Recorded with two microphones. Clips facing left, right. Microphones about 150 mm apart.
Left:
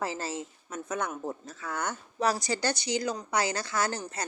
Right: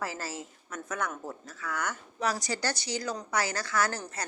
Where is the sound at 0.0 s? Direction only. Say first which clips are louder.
Left 3 dB; 25° left (ahead or behind).